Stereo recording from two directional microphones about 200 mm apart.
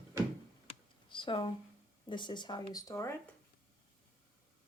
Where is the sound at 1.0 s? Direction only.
25° left (ahead or behind).